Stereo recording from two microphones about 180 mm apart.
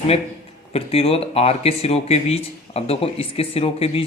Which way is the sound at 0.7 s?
35° left (ahead or behind).